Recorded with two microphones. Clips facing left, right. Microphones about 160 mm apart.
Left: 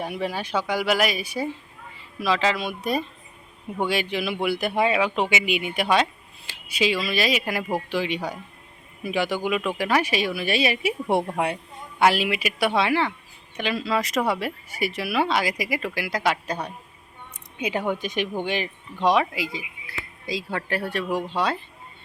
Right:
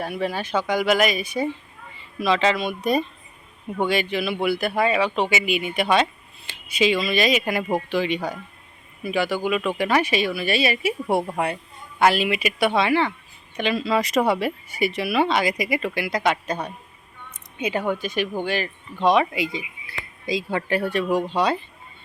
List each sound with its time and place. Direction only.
0.0 s speech: 10° left (ahead or behind)
11.2 s speech: 5° right (ahead or behind)
11.5 s speech: 10° left (ahead or behind)
19.2 s speech: centre (ahead or behind)
20.5 s speech: 10° right (ahead or behind)
20.7 s speech: 5° left (ahead or behind)